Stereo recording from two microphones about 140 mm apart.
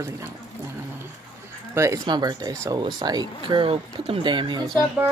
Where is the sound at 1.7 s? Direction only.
20° right (ahead or behind).